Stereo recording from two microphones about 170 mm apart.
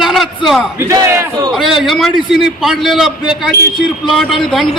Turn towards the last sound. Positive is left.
turn(degrees=0)  # may be behind; listen again after turning